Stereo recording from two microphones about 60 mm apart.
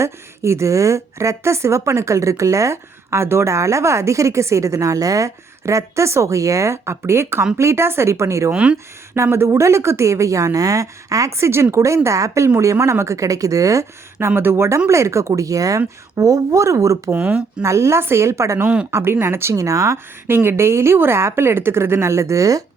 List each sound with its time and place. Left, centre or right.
0.0 s a woman's voice: right
9.1 s a woman's voice: right
14.2 s a woman's voice: right
15.3 s a woman's voice: right
17.1 s speech: right
17.6 s a woman's voice: right
18.6 s speech: centre
18.9 s a woman's voice: right
19.5 s a woman's voice: right
20.2 s a woman's voice: right